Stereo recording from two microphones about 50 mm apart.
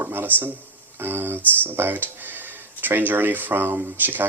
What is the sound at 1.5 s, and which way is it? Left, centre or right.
Speech, right.